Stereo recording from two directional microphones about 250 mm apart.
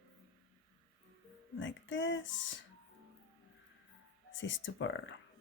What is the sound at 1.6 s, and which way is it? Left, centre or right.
Speech, left.